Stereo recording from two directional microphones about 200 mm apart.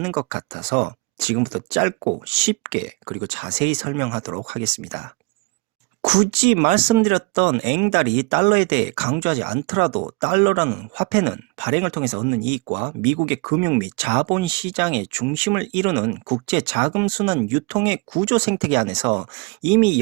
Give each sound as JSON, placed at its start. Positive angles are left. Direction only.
{"t": 0.2, "sound": "speech", "side_deg": -25}
{"t": 12.7, "sound": "speech", "side_deg": -25}
{"t": 13.8, "sound": "speech", "side_deg": -25}